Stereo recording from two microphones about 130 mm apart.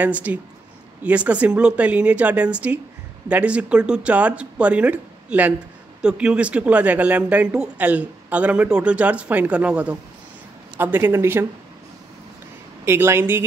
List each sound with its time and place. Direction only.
0.0 s speech: 10° right (ahead or behind)
12.8 s speech: 20° right (ahead or behind)